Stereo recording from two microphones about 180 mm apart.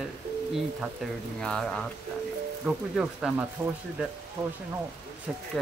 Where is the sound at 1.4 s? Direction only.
5° left (ahead or behind).